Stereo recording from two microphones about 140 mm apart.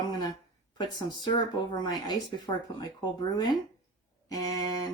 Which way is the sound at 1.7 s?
30° left (ahead or behind).